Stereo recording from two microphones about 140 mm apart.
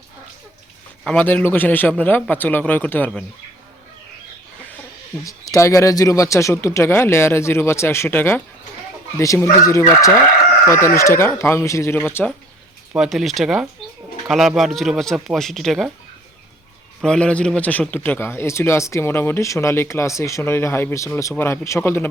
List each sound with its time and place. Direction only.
1.0 s a man's voice: 10° left (ahead or behind)
5.2 s speech: 20° left (ahead or behind)
13.0 s speech: centre (ahead or behind)
17.0 s a man's voice: 5° left (ahead or behind)